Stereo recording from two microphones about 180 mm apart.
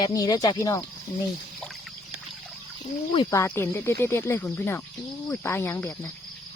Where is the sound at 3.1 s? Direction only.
25° left (ahead or behind).